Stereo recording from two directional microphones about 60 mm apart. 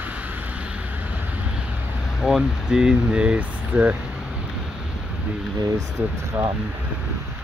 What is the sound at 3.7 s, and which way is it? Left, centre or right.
Speech, right.